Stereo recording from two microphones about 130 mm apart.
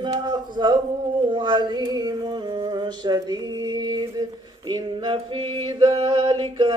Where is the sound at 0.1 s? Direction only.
35° right (ahead or behind).